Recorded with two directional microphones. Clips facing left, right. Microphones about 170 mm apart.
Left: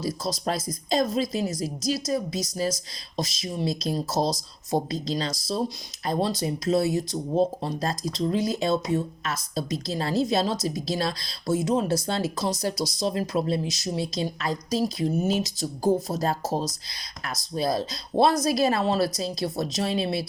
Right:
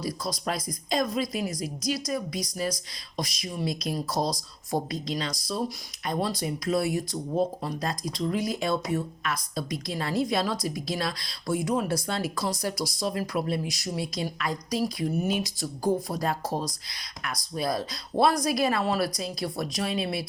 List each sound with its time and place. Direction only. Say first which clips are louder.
0.0 s speech: left 3 dB; 25° left (ahead or behind)